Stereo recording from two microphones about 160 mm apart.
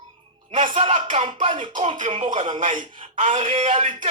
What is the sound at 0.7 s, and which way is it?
Speech, 35° right (ahead or behind).